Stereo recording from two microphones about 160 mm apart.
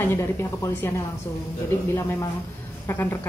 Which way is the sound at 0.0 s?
15° left (ahead or behind).